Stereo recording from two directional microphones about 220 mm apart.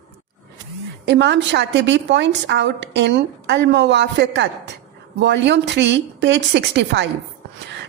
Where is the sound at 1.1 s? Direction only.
50° right (ahead or behind).